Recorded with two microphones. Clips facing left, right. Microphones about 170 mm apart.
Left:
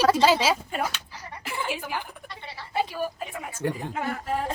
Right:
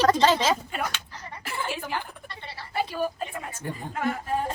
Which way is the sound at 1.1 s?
10° left (ahead or behind).